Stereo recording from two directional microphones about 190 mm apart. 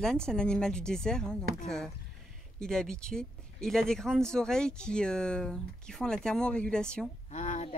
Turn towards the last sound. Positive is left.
turn(degrees=40)  # may be behind; listen again after turning